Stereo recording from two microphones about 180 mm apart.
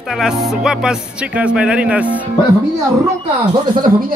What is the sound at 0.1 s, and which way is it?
A man's voice, centre (ahead or behind).